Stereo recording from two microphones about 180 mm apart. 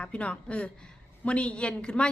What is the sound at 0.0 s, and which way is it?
A woman's voice, 5° left (ahead or behind).